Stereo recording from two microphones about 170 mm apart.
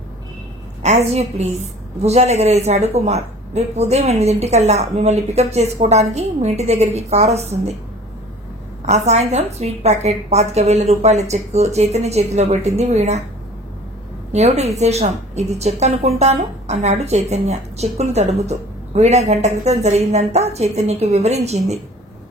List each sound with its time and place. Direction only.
0.8 s a woman's voice: 40° right (ahead or behind)
8.8 s a woman's voice: 40° right (ahead or behind)
14.3 s a woman's voice: 40° right (ahead or behind)